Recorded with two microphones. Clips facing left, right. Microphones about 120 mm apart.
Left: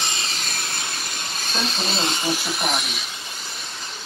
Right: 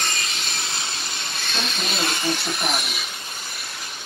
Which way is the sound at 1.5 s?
35° left (ahead or behind).